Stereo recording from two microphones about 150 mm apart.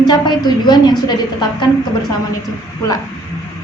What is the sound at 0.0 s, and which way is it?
A woman's voice, 30° left (ahead or behind).